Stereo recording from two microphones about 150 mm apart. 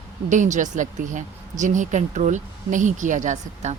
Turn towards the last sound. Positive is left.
turn(degrees=-50)  # may be behind; listen again after turning